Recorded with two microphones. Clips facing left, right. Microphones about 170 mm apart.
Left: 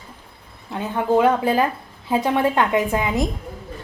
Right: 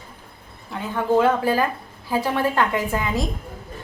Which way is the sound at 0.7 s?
20° left (ahead or behind).